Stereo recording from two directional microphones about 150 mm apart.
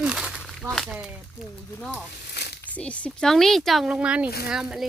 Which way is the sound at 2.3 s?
90° left.